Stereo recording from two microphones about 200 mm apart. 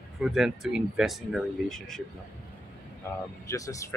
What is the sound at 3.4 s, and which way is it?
Speech, 15° left (ahead or behind).